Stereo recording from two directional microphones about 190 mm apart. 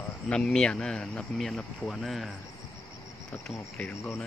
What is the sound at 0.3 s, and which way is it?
Speech, 5° left (ahead or behind).